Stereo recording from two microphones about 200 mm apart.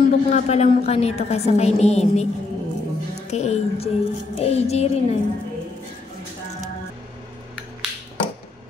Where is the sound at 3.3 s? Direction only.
35° left (ahead or behind).